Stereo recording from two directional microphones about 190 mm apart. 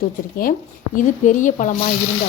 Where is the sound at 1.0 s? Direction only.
45° left (ahead or behind).